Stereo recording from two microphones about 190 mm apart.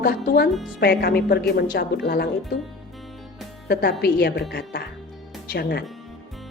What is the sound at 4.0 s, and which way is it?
A woman's voice, 60° left (ahead or behind).